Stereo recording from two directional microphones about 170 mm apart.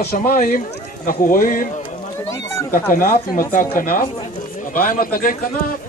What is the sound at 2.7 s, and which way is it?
A man's voice, 55° left (ahead or behind).